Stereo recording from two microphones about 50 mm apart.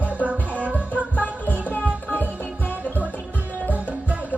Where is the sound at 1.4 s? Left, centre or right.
Left.